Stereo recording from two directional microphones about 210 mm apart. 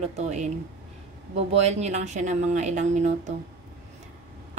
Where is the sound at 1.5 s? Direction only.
30° right (ahead or behind).